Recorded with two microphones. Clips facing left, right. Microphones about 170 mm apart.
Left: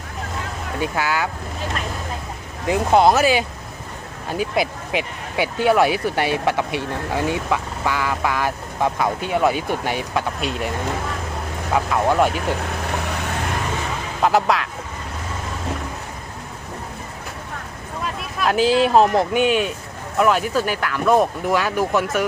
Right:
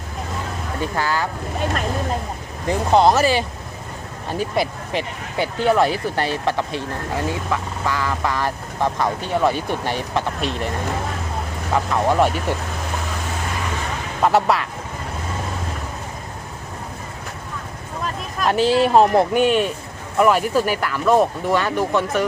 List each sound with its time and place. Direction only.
0.8 s speech: 5° left (ahead or behind)
2.6 s speech: 5° left (ahead or behind)
11.7 s speech: centre (ahead or behind)
14.2 s speech: centre (ahead or behind)
18.3 s speech: centre (ahead or behind)